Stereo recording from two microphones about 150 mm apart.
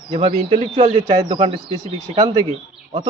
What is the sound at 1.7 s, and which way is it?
Speech, 25° right (ahead or behind).